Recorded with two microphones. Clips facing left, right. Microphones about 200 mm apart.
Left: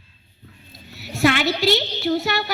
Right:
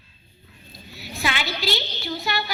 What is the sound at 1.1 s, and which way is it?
A woman's voice, 70° left (ahead or behind).